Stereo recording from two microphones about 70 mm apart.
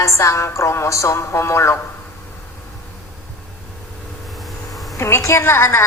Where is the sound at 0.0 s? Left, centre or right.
Left.